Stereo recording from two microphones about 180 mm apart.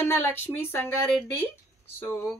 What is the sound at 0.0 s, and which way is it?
Speech, 10° left (ahead or behind).